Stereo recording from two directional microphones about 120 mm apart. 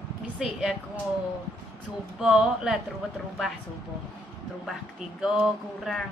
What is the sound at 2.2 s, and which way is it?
Speech, 5° right (ahead or behind).